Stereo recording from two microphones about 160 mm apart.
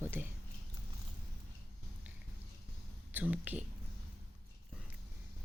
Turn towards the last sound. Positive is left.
turn(degrees=-10)  # may be behind; listen again after turning